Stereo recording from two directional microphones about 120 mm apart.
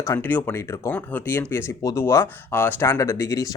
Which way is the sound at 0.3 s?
15° left (ahead or behind).